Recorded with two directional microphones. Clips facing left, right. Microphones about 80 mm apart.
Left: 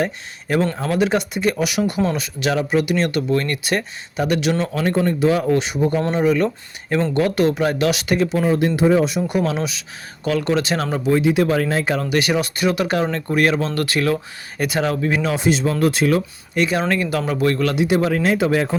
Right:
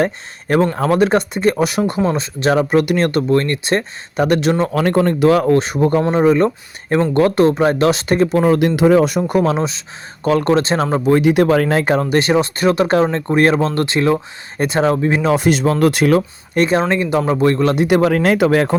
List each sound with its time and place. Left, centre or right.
0.0 s speech: right
4.8 s speech: right
5.5 s speech: right
8.4 s speech: right
9.0 s speech: right
11.1 s speech: right
11.9 s speech: right
15.4 s speech: right
16.6 s speech: right
16.9 s speech: right
17.7 s speech: right